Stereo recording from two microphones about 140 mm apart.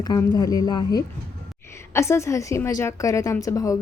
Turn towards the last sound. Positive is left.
turn(degrees=25)  # may be behind; listen again after turning